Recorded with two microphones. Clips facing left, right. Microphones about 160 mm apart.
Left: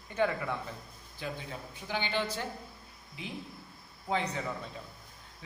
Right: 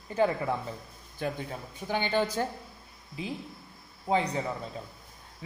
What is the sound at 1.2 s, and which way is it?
A woman's voice, 50° right (ahead or behind).